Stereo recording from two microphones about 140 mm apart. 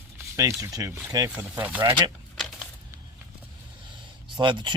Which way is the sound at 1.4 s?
10° right (ahead or behind).